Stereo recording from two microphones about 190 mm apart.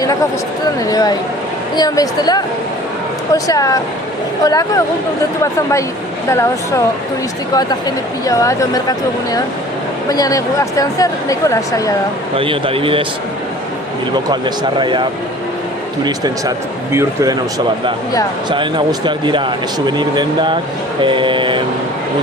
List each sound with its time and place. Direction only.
0.9 s speech: 20° left (ahead or behind)
7.5 s speech: 20° left (ahead or behind)
12.4 s speech: 30° right (ahead or behind)
14.3 s speech: 25° right (ahead or behind)
16.0 s speech: 20° right (ahead or behind)
18.4 s speech: 25° right (ahead or behind)